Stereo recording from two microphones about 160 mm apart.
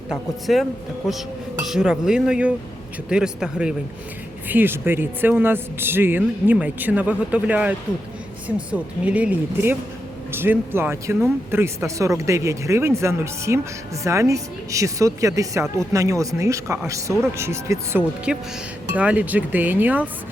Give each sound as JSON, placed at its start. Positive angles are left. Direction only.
{"t": 0.1, "sound": "a man's voice", "side_deg": 0}
{"t": 18.3, "sound": "a man's voice", "side_deg": -5}